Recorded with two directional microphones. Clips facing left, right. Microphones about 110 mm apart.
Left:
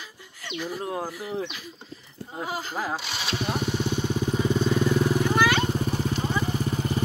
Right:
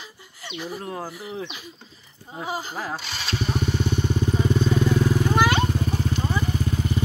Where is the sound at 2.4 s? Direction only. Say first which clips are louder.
Right 2 dB; 15° right (ahead or behind).